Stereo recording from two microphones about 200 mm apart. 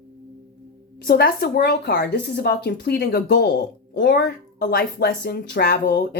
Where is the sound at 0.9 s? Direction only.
55° left (ahead or behind).